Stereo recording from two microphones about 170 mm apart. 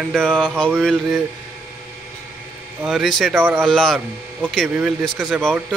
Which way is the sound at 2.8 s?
Centre (ahead or behind).